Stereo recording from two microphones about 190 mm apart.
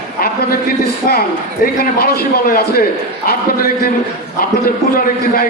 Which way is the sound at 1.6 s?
50° left (ahead or behind).